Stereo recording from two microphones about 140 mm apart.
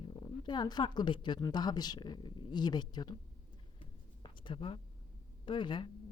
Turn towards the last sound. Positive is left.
turn(degrees=35)  # may be behind; listen again after turning